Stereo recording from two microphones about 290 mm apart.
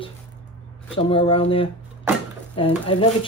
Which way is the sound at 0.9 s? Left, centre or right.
Centre.